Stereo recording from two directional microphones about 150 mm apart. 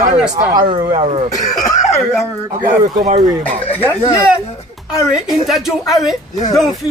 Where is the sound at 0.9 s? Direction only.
45° right (ahead or behind).